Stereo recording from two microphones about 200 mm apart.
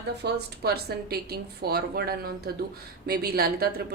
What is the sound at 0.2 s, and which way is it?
A woman's voice, 55° right (ahead or behind).